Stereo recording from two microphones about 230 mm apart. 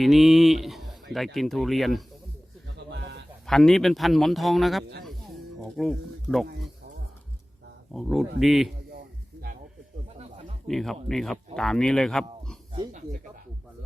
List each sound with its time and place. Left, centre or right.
0.0 s speech: centre
2.7 s a sound: right
3.4 s speech: centre
5.0 s a sound: centre
7.9 s speech: centre
10.7 s speech: centre